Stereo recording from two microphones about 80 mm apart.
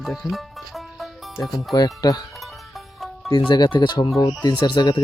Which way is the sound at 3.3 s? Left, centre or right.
Left.